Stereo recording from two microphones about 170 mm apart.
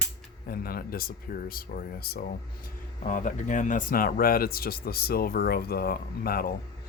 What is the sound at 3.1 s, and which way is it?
Speech, 50° left (ahead or behind).